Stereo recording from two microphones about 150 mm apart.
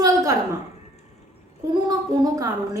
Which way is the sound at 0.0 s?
25° right (ahead or behind).